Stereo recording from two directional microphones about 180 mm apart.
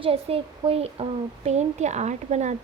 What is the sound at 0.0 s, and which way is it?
A woman's voice, 30° right (ahead or behind).